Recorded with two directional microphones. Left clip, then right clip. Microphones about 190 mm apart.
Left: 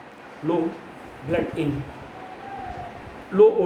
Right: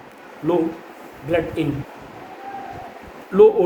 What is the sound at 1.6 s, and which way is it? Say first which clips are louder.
Speech: right 3 dB; 55° right (ahead or behind).